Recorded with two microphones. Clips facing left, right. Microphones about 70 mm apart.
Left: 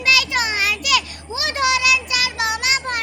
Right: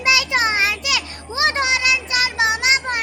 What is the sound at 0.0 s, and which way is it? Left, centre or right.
Children playing, right.